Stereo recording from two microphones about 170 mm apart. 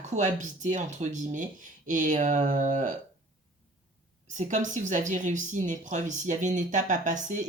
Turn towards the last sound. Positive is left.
turn(degrees=-45)  # may be behind; listen again after turning